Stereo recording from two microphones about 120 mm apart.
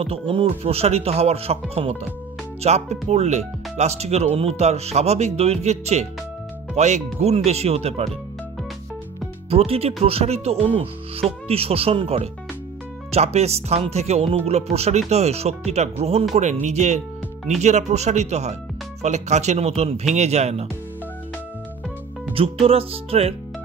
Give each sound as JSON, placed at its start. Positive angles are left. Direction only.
{"t": 0.0, "sound": "speech", "side_deg": -50}
{"t": 9.5, "sound": "speech", "side_deg": -55}
{"t": 13.1, "sound": "speech", "side_deg": -65}
{"t": 16.6, "sound": "speech", "side_deg": -70}
{"t": 22.3, "sound": "speech", "side_deg": -50}